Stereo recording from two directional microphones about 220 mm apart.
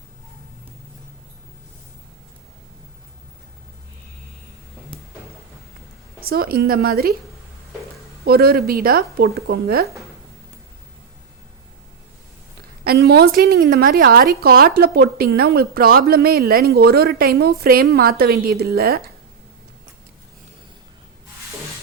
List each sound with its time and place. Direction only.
6.2 s a woman's voice: 40° right (ahead or behind)
8.2 s a woman's voice: 45° right (ahead or behind)
12.8 s a woman's voice: 45° right (ahead or behind)